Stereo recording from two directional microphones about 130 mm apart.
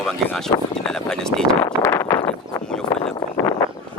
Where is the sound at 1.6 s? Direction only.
20° left (ahead or behind).